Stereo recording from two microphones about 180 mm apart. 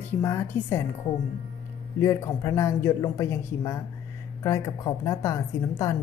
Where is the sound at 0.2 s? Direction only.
15° left (ahead or behind).